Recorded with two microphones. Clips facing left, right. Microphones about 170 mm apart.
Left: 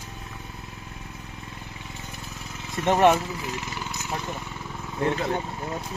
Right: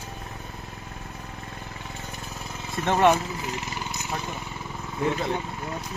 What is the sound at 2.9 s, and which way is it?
Speech, 20° left (ahead or behind).